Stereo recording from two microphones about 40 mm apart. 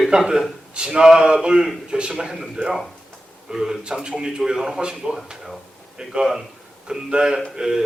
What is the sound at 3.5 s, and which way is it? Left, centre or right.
Speech, centre.